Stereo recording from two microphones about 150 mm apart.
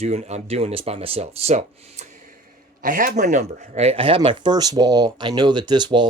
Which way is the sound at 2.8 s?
65° right (ahead or behind).